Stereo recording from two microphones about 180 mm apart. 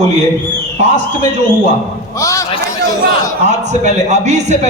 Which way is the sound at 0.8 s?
40° right (ahead or behind).